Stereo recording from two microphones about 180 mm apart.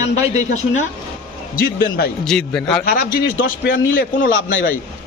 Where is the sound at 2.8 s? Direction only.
55° left (ahead or behind); by 4.6 s 90° left.